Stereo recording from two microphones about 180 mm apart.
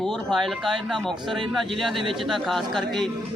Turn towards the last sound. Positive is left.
turn(degrees=0)  # may be behind; listen again after turning